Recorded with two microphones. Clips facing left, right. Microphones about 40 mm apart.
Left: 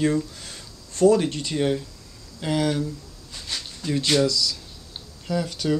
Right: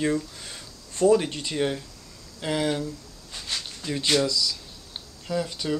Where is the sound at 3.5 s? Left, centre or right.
Centre.